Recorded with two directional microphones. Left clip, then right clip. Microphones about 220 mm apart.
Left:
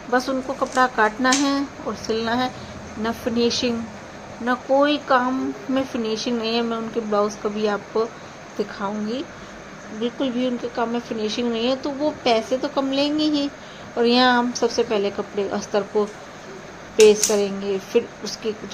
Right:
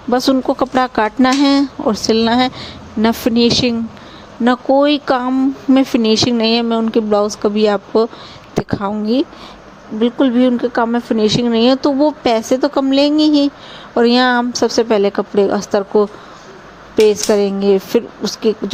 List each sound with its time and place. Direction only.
0.1 s speech: 50° right (ahead or behind)